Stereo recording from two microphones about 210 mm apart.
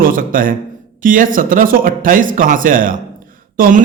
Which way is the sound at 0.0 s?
40° right (ahead or behind).